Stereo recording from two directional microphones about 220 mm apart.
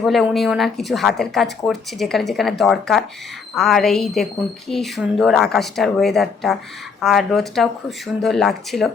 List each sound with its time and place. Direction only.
0.0 s speech: centre (ahead or behind)